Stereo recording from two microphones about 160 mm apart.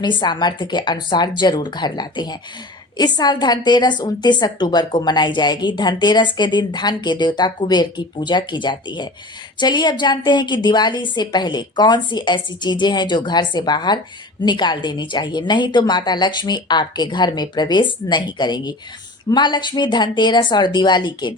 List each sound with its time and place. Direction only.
0.0 s a woman's voice: 30° left (ahead or behind)